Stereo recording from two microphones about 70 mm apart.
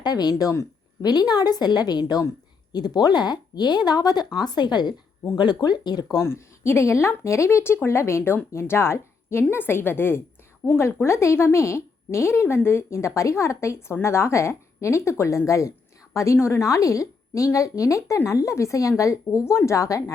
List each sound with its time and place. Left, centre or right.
0.0 s a woman's voice: left
6.2 s a woman's voice: left